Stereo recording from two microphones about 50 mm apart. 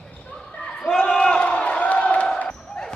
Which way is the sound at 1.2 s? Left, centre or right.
Centre.